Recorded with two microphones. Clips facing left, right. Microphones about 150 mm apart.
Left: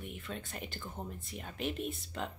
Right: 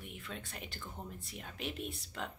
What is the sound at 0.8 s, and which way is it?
Speech, 20° left (ahead or behind).